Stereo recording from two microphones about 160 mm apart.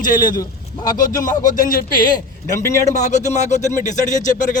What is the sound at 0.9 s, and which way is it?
A man's voice, 60° left (ahead or behind).